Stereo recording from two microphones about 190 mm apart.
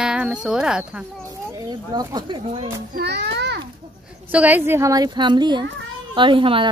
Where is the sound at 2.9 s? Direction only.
60° right (ahead or behind).